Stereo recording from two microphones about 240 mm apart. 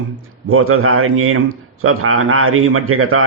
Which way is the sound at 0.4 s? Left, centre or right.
Right.